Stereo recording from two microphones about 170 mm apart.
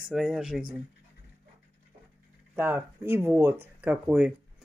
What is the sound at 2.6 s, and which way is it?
Speech, 10° right (ahead or behind).